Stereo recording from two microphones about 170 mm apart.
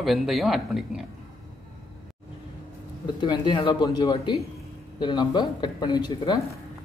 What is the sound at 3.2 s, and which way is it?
Speech, 25° left (ahead or behind).